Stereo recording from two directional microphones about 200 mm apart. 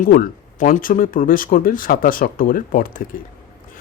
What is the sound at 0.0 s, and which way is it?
Speech, 45° left (ahead or behind).